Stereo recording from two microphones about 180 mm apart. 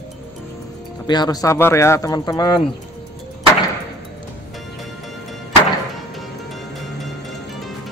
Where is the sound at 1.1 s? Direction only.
20° left (ahead or behind).